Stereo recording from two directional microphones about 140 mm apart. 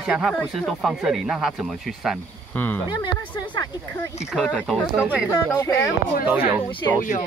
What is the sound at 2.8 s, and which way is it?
Speech, 30° left (ahead or behind).